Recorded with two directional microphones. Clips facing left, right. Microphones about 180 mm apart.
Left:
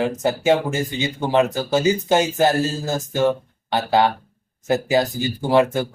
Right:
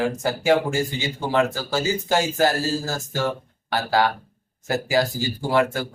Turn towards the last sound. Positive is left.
turn(degrees=20)  # may be behind; listen again after turning